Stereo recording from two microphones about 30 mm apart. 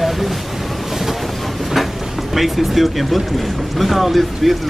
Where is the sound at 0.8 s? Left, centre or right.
Centre.